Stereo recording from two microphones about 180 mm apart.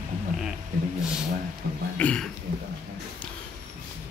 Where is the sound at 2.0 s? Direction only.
5° left (ahead or behind).